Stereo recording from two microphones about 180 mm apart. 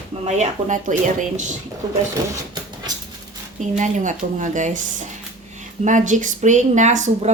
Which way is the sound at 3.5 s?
45° right (ahead or behind).